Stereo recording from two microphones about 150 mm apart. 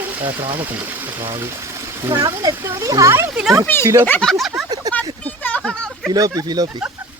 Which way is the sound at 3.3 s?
5° right (ahead or behind).